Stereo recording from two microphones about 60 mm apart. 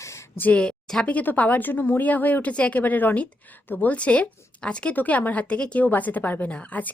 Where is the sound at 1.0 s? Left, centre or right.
Left.